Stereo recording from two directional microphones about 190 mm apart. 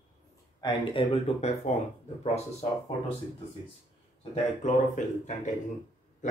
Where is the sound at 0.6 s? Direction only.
25° left (ahead or behind).